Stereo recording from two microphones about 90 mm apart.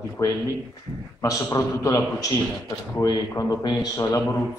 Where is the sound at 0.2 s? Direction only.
40° left (ahead or behind).